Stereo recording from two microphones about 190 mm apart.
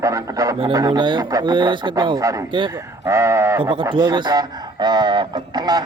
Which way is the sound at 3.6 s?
25° right (ahead or behind).